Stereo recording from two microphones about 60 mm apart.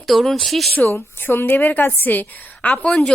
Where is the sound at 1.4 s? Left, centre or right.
Left.